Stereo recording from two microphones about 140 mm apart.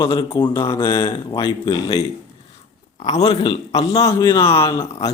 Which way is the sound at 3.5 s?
30° left (ahead or behind).